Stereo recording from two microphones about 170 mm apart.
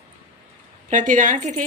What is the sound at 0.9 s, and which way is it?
Speech, 50° right (ahead or behind).